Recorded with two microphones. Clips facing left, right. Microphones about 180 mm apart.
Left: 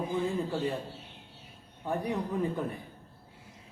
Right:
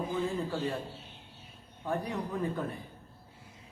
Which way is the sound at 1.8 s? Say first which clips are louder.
Left 2 dB; 15° left (ahead or behind).